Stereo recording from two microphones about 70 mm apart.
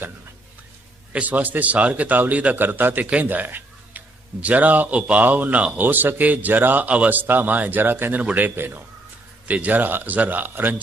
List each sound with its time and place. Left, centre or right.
1.1 s speech: right
3.1 s a sound: right
4.4 s speech: right